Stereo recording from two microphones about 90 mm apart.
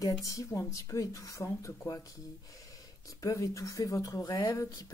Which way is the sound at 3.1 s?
40° left (ahead or behind).